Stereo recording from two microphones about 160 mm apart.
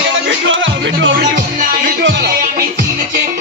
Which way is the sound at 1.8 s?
90° right.